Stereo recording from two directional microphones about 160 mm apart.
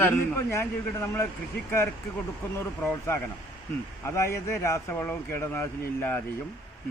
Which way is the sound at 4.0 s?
15° left (ahead or behind).